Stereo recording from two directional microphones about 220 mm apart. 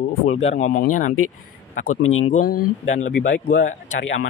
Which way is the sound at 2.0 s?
70° left (ahead or behind).